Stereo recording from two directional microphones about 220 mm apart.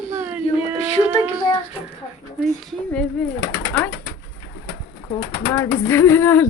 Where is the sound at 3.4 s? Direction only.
55° left (ahead or behind).